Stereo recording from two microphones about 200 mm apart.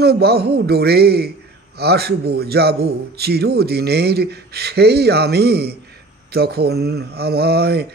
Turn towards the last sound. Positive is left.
turn(degrees=-55)  # may be behind; listen again after turning